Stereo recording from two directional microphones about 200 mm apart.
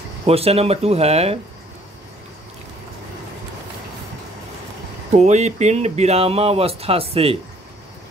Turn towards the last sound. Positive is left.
turn(degrees=-30)  # may be behind; listen again after turning